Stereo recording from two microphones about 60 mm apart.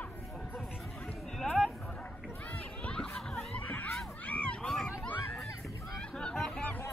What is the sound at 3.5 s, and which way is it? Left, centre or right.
Crowd, left.